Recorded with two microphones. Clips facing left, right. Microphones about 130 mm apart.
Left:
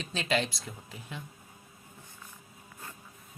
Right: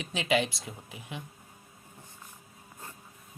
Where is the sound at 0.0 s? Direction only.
15° right (ahead or behind).